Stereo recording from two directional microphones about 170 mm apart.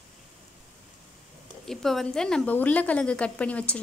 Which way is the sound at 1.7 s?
Centre (ahead or behind).